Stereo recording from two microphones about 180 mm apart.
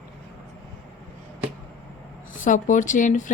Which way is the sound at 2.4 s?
45° left (ahead or behind).